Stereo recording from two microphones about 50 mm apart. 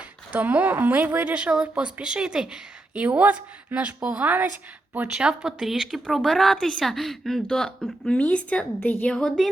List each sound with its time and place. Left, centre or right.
0.3 s a woman's voice: right
1.2 s speech: right
3.0 s a woman's voice: right
5.1 s a woman's voice: centre
8.2 s a woman's voice: left